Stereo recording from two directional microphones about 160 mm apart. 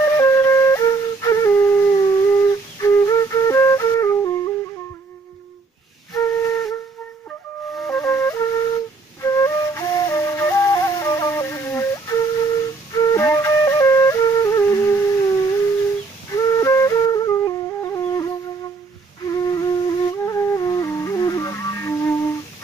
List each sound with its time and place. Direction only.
0.0 s flute: 15° left (ahead or behind)
6.1 s flute: 20° left (ahead or behind)
7.2 s flute: 5° left (ahead or behind)
8.0 s flute: 15° left (ahead or behind)